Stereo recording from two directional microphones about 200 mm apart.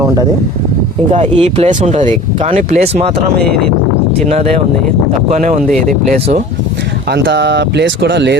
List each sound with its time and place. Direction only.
0.0 s speech: 15° right (ahead or behind)
1.1 s speech: 35° right (ahead or behind)
5.3 s speech: 40° right (ahead or behind)
7.1 s speech: 60° right (ahead or behind)